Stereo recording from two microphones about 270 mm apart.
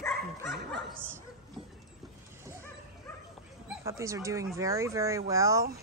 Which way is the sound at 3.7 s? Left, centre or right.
Centre.